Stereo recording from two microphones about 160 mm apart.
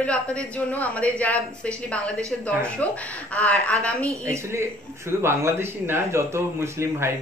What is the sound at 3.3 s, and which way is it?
Speech, 10° left (ahead or behind).